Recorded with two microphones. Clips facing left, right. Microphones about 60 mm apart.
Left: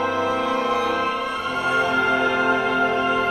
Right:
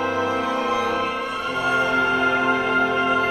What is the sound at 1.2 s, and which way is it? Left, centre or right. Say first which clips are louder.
Music: even; left.